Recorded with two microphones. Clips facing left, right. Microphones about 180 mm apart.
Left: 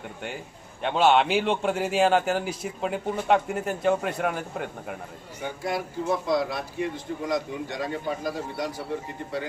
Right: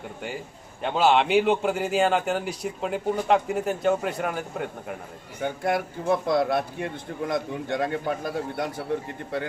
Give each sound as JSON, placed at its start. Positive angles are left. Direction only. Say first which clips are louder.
{"t": 0.8, "sound": "a man's voice", "louder": "even", "side_deg": 0}
{"t": 5.4, "sound": "a man's voice", "louder": "right 4 dB", "side_deg": -60}